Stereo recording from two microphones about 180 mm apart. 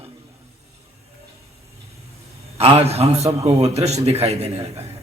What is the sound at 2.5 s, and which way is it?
A man's voice, 35° right (ahead or behind).